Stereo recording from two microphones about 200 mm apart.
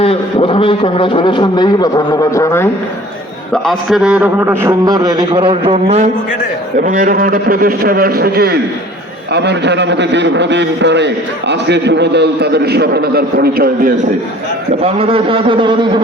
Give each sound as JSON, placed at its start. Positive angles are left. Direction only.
{"t": 0.0, "sound": "a man's voice", "side_deg": 25}
{"t": 3.5, "sound": "a man's voice", "side_deg": 0}
{"t": 6.7, "sound": "a man's voice", "side_deg": -45}
{"t": 14.8, "sound": "a man's voice", "side_deg": -30}